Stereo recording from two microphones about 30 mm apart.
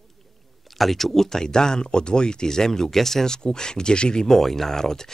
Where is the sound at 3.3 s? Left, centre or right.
Left.